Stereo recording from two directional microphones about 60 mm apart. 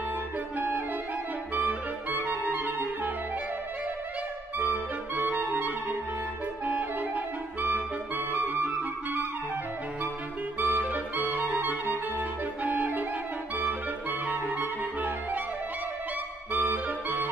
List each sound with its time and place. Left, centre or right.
0.6 s clarinet: right
4.6 s music: right
10.6 s clarinet: right
14.2 s clarinet: right
16.5 s music: right